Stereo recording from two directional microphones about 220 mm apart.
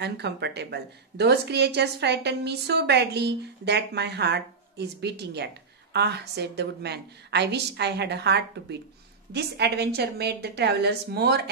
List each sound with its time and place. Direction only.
0.0 s a woman's voice: 50° right (ahead or behind)